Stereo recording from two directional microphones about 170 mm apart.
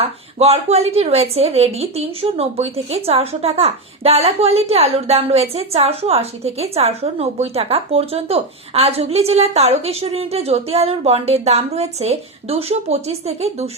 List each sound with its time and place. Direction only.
0.0 s a woman's voice: 35° right (ahead or behind)